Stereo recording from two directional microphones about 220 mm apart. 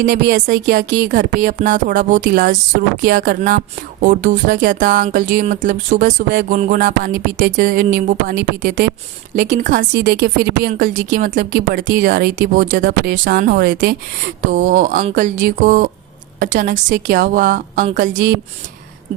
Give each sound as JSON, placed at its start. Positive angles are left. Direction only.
{"t": 0.0, "sound": "speech", "side_deg": -40}